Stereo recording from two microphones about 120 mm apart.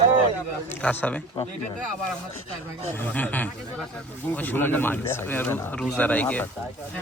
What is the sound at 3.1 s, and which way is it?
A man's voice, 15° left (ahead or behind).